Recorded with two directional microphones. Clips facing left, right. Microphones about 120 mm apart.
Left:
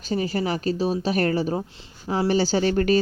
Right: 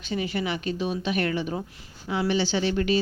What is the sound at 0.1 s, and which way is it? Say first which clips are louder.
Speech: left 4 dB; 40° left (ahead or behind).